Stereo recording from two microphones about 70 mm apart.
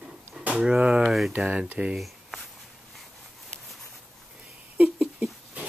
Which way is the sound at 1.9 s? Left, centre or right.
Centre.